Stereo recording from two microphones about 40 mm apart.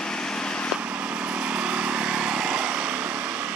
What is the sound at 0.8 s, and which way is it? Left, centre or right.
Vehicle, right.